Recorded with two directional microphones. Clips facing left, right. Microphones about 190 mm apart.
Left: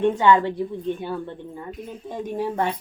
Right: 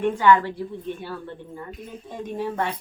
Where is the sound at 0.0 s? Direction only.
25° left (ahead or behind).